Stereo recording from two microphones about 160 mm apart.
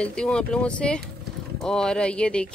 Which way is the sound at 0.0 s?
5° left (ahead or behind).